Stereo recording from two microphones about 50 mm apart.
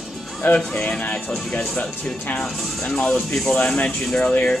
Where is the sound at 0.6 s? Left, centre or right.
Centre.